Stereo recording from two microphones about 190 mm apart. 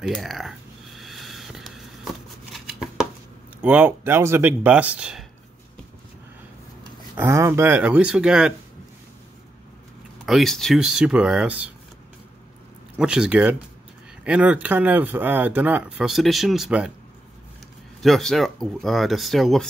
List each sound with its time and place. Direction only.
0.0 s a sound: centre (ahead or behind)
3.6 s speech: 10° right (ahead or behind)
7.2 s speech: 15° right (ahead or behind)
10.2 s speech: centre (ahead or behind)
12.9 s speech: 5° right (ahead or behind)
18.0 s speech: centre (ahead or behind)